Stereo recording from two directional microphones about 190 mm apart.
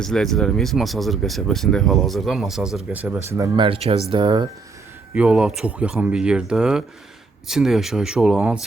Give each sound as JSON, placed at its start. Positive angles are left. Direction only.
{"t": 0.0, "sound": "speech", "side_deg": 5}
{"t": 5.1, "sound": "speech", "side_deg": -5}